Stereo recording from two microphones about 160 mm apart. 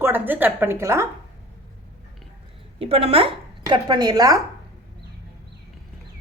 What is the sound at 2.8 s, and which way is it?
A woman's voice, 40° right (ahead or behind).